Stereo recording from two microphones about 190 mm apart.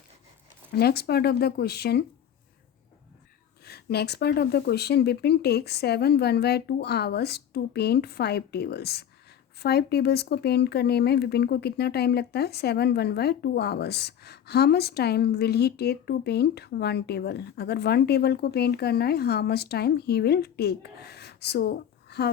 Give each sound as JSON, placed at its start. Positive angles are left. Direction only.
{"t": 0.8, "sound": "speech", "side_deg": 55}
{"t": 3.7, "sound": "speech", "side_deg": 55}